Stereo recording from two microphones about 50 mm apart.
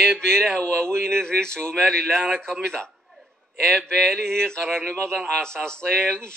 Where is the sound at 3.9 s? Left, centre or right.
Centre.